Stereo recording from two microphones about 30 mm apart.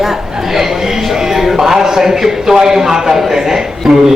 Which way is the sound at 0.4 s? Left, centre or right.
Centre.